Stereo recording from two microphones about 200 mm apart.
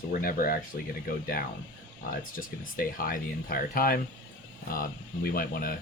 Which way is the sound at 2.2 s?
45° left (ahead or behind).